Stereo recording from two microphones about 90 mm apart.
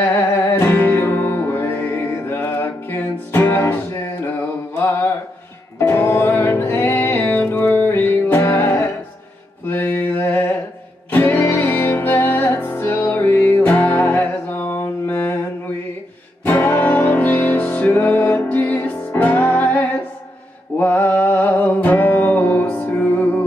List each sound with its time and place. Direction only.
0.1 s music: 25° left (ahead or behind)
4.7 s mantra: 25° left (ahead or behind)
5.8 s music: 30° left (ahead or behind)
9.7 s mantra: 20° left (ahead or behind)
11.1 s music: 25° left (ahead or behind)
16.5 s music: 25° left (ahead or behind)